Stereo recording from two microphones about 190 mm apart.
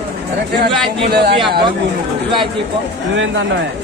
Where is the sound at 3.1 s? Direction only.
75° right (ahead or behind).